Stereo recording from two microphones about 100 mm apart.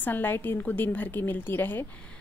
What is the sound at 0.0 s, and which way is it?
A woman's voice, 20° left (ahead or behind).